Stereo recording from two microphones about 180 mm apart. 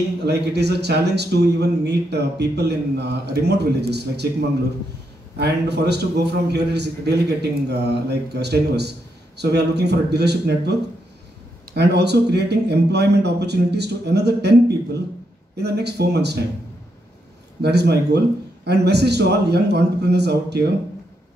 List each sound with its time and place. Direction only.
0.2 s speech: 65° right (ahead or behind)
5.4 s speech: 65° right (ahead or behind)
15.5 s speech: 65° right (ahead or behind)
17.6 s speech: 65° right (ahead or behind)